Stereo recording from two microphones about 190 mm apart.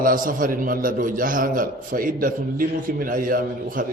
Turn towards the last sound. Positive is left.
turn(degrees=-50)  # may be behind; listen again after turning